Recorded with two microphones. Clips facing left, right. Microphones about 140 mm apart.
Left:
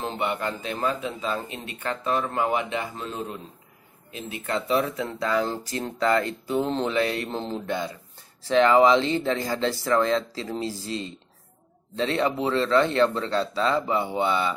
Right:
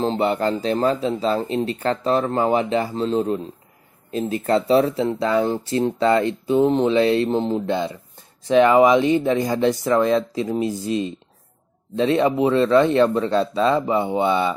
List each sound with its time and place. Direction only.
0.0 s speech: 30° right (ahead or behind)